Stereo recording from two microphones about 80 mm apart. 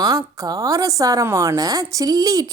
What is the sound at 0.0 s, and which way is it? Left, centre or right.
A woman's voice, right.